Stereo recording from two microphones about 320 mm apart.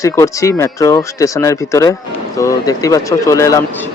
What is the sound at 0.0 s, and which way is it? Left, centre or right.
Speech, centre.